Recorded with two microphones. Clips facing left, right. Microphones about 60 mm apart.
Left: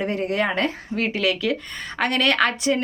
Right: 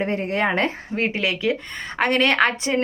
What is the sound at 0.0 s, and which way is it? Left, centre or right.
Speech, right.